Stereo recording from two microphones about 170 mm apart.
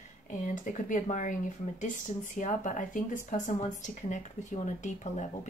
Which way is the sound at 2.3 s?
50° left (ahead or behind).